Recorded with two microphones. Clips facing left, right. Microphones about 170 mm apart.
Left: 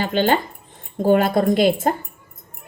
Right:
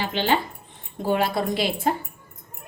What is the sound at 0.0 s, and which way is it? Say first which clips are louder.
A woman's voice: left 5 dB; 50° left (ahead or behind).